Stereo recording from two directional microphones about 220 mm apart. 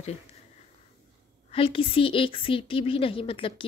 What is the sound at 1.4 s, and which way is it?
A woman's voice, 25° left (ahead or behind).